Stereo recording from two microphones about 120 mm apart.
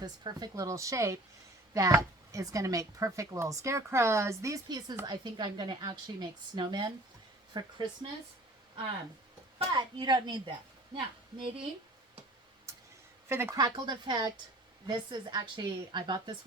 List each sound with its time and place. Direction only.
0.0 s a woman's voice: 35° right (ahead or behind)
9.7 s speech: 40° right (ahead or behind)
13.2 s speech: 20° right (ahead or behind)
13.6 s speech: 35° right (ahead or behind)